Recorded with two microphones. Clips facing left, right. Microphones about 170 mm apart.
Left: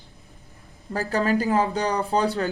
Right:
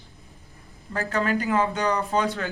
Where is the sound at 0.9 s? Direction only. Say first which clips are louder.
Left 2 dB; 35° left (ahead or behind).